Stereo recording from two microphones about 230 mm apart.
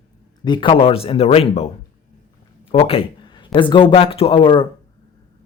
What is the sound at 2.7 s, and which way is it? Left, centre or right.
Speech, left.